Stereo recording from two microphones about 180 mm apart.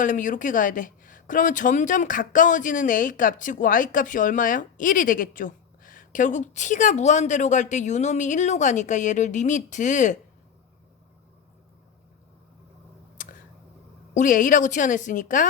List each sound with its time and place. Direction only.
0.0 s speech: 45° left (ahead or behind)
13.2 s a sound: 45° left (ahead or behind)
14.1 s speech: 45° left (ahead or behind)